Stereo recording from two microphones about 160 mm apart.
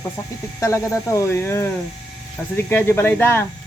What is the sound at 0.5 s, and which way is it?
Speech, 20° left (ahead or behind).